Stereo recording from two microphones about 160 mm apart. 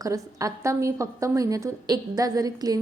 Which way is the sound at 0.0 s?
20° right (ahead or behind).